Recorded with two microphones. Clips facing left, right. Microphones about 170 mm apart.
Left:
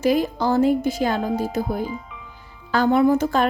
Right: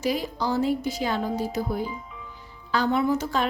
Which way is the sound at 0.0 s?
55° left (ahead or behind).